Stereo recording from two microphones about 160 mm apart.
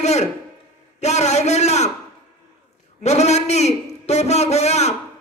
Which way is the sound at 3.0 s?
45° left (ahead or behind).